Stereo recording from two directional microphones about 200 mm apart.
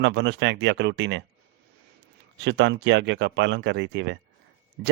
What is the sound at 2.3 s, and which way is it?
Speech, 60° right (ahead or behind).